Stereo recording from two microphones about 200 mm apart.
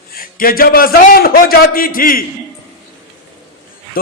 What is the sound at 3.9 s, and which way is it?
Speech, 45° left (ahead or behind).